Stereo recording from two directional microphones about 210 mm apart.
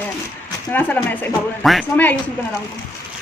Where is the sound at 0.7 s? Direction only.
5° left (ahead or behind).